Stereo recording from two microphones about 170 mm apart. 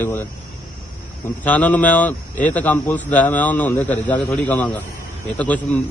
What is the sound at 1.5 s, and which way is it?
A man's voice, 10° left (ahead or behind).